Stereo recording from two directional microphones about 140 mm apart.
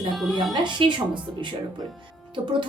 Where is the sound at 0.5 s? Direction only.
35° right (ahead or behind).